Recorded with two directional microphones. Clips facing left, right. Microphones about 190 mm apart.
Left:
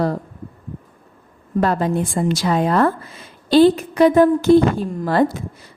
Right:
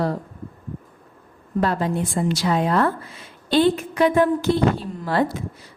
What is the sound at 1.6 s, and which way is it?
A woman's voice, 45° left (ahead or behind).